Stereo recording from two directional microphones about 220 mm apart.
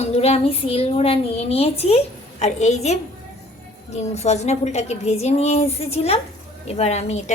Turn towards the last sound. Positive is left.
turn(degrees=30)  # may be behind; listen again after turning